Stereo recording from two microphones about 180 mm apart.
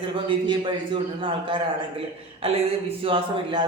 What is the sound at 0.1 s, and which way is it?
A man's voice, 30° right (ahead or behind).